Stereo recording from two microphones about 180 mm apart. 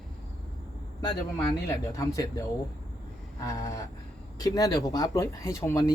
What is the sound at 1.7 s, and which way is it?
Speech, 15° left (ahead or behind).